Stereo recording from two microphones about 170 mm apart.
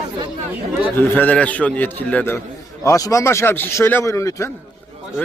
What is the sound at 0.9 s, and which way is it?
A man's voice, 10° left (ahead or behind).